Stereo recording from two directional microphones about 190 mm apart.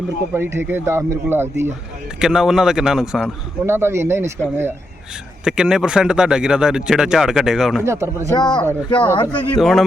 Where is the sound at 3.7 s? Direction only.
15° right (ahead or behind).